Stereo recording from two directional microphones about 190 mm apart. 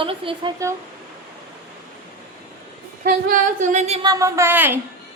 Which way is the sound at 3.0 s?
45° right (ahead or behind).